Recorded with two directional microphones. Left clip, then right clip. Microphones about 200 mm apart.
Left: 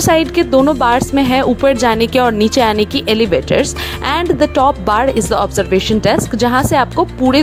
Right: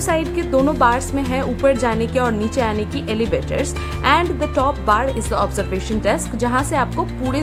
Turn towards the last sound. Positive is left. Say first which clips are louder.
# left 10 dB
turn(degrees=35)  # may be behind; listen again after turning